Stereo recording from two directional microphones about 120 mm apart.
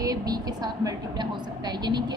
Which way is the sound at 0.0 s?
30° right (ahead or behind).